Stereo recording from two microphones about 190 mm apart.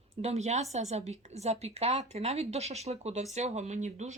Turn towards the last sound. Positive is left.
turn(degrees=-40)  # may be behind; listen again after turning